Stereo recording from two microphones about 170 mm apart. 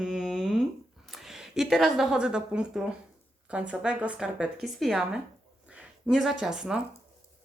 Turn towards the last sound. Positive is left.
turn(degrees=-5)  # may be behind; listen again after turning